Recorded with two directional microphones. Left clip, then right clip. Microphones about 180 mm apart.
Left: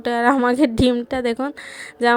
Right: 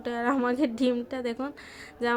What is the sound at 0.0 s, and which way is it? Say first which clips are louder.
A woman's voice: left 10 dB; 50° left (ahead or behind).